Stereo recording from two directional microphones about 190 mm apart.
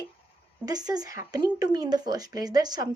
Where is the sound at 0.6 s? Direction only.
20° right (ahead or behind).